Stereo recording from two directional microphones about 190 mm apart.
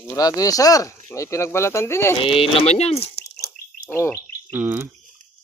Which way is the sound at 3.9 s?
10° left (ahead or behind).